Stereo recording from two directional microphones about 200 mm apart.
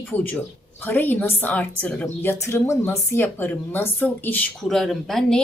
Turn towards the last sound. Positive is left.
turn(degrees=0)  # may be behind; listen again after turning